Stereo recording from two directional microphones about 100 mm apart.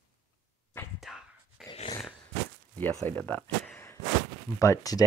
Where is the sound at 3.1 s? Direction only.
20° left (ahead or behind).